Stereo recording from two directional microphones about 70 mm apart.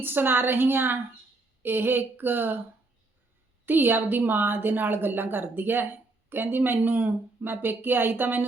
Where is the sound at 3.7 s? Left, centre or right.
Right.